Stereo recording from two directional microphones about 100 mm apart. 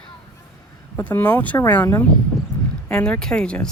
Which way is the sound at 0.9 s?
20° left (ahead or behind).